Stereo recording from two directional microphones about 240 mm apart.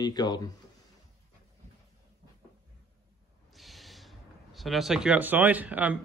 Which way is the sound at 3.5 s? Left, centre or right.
Centre.